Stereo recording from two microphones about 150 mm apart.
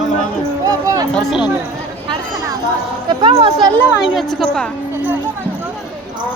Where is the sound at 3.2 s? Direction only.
35° right (ahead or behind).